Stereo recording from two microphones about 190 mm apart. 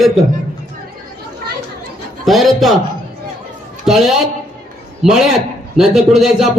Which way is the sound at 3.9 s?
Centre (ahead or behind).